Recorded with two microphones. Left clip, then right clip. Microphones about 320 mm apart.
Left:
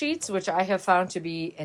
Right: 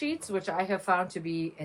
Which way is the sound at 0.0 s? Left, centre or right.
Centre.